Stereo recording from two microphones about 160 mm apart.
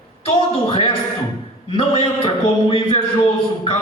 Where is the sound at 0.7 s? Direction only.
35° left (ahead or behind).